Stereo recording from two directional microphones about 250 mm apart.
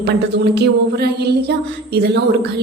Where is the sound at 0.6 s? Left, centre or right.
Right.